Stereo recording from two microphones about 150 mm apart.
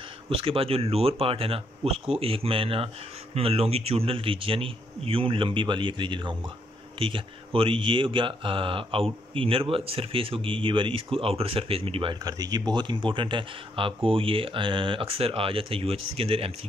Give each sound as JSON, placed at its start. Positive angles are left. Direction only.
{"t": 0.4, "sound": "speech", "side_deg": -40}
{"t": 12.2, "sound": "speech", "side_deg": -25}